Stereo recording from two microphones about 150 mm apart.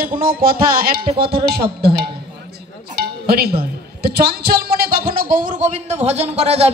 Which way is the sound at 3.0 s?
90° right.